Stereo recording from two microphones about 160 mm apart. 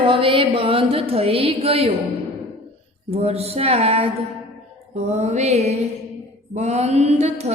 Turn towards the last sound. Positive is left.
turn(degrees=-45)  # may be behind; listen again after turning